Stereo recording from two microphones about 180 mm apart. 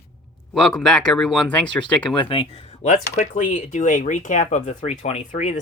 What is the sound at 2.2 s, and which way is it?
Speech, 30° left (ahead or behind).